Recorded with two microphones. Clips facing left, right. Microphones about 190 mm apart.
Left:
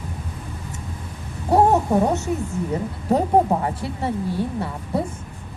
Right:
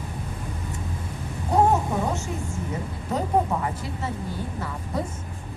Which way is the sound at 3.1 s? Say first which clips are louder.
Left 6 dB; 35° left (ahead or behind).